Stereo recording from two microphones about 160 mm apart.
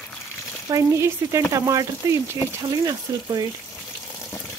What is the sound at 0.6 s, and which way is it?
Frying, 20° right (ahead or behind).